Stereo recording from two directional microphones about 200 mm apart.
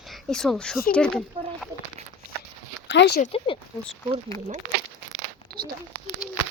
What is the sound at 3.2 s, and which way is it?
Speech, 30° left (ahead or behind).